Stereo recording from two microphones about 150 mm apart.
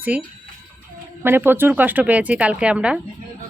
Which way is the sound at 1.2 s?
15° right (ahead or behind).